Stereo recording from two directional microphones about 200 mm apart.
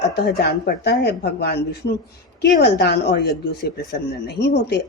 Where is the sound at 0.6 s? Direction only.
55° left (ahead or behind).